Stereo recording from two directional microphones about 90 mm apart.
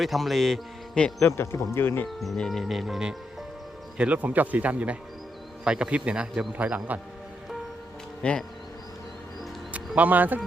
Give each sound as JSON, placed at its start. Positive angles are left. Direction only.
{"t": 0.0, "sound": "a man's voice", "side_deg": 0}
{"t": 1.2, "sound": "speech", "side_deg": 25}
{"t": 2.0, "sound": "speech", "side_deg": 0}
{"t": 8.2, "sound": "speech", "side_deg": 10}
{"t": 9.7, "sound": "speech", "side_deg": -15}